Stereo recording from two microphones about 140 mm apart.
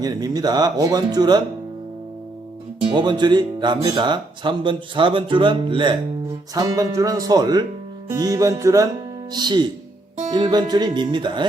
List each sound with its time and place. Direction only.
0.0 s speech: 30° right (ahead or behind)
2.9 s speech: 30° right (ahead or behind)
6.5 s speech: 25° right (ahead or behind)